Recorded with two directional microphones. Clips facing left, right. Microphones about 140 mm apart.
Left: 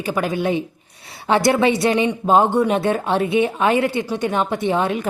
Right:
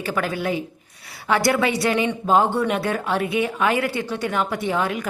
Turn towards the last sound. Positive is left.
turn(degrees=25)  # may be behind; listen again after turning